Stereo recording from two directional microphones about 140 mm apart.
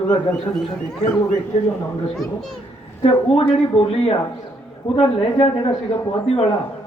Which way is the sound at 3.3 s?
45° left (ahead or behind).